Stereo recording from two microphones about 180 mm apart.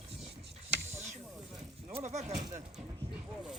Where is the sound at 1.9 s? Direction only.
40° right (ahead or behind).